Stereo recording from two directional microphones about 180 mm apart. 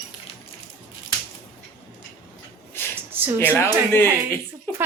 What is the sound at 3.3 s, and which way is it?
Speech, 15° left (ahead or behind).